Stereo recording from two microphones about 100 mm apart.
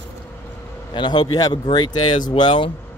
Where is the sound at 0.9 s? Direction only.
50° left (ahead or behind).